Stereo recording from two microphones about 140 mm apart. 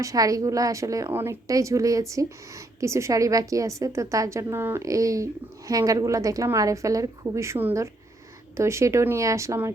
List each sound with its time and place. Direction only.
0.0 s a woman's voice: 25° right (ahead or behind)